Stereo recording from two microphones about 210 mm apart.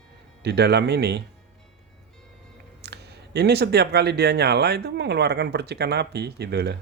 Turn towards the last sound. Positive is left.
turn(degrees=-50)  # may be behind; listen again after turning